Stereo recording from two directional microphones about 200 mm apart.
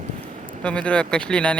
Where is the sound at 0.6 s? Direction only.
5° left (ahead or behind).